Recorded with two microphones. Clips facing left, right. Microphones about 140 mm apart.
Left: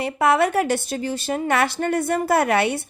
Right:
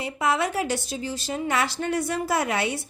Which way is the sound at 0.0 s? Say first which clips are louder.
Left 6 dB; 60° left (ahead or behind).